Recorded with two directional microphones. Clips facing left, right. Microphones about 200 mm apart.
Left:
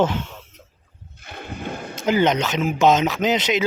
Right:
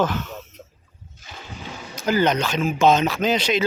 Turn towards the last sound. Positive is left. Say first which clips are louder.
# left 1 dB
turn(degrees=20)  # may be behind; listen again after turning